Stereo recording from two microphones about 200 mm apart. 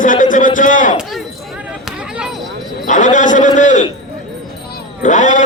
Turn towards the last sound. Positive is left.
turn(degrees=40)  # may be behind; listen again after turning